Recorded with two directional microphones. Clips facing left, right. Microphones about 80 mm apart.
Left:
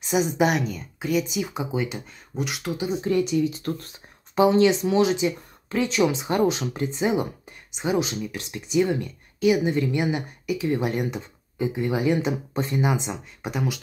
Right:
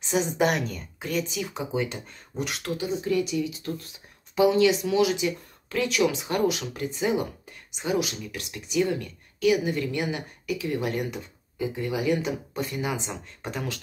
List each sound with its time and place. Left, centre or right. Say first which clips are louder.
0.1 s a woman's voice: left 2 dB; centre
1.2 s speech: left 3 dB; centre
3.1 s speech: left 5 dB; left; by 13.7 s centre